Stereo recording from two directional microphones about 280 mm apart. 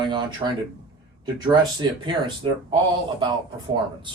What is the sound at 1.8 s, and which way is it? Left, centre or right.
Speech, centre.